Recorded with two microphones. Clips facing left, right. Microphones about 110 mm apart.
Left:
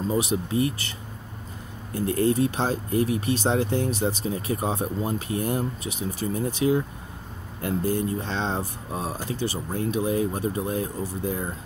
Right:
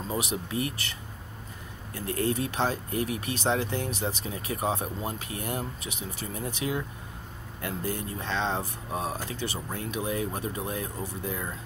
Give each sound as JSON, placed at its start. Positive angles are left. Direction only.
{"t": 0.2, "sound": "speech", "side_deg": 30}
{"t": 2.0, "sound": "speech", "side_deg": 30}